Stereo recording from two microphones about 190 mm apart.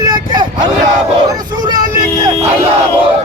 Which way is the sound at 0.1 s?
25° right (ahead or behind).